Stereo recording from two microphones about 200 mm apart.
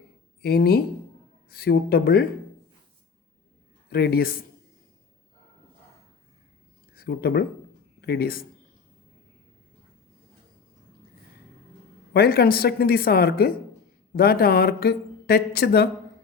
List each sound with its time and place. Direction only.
0.4 s speech: 50° left (ahead or behind)
3.8 s speech: 50° left (ahead or behind)
6.9 s speech: 50° left (ahead or behind)
12.1 s speech: 50° left (ahead or behind)